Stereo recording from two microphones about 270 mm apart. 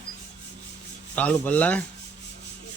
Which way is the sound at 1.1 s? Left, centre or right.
Centre.